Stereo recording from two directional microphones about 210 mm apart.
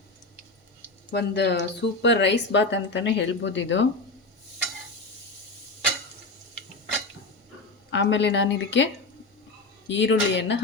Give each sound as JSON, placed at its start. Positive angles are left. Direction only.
{"t": 1.1, "sound": "speech", "side_deg": 55}
{"t": 7.9, "sound": "speech", "side_deg": 60}
{"t": 9.9, "sound": "speech", "side_deg": 60}